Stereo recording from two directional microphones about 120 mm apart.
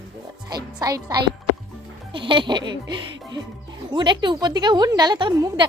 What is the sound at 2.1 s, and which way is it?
A woman's voice, 45° right (ahead or behind).